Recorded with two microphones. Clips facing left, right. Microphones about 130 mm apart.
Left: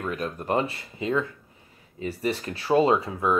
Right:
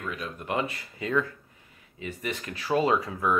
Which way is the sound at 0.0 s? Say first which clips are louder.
Left 5 dB; 45° left (ahead or behind).